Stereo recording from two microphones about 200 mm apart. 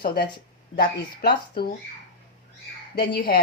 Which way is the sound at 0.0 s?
50° left (ahead or behind).